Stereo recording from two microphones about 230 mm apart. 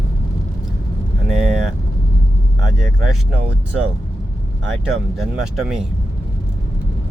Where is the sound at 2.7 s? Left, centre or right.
Centre.